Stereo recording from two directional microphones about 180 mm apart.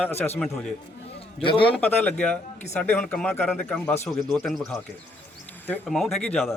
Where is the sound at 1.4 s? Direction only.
30° left (ahead or behind).